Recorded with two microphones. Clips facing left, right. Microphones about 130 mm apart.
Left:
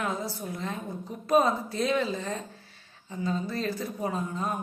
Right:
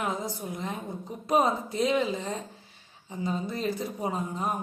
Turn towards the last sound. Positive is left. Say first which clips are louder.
# even
turn(degrees=-20)  # may be behind; listen again after turning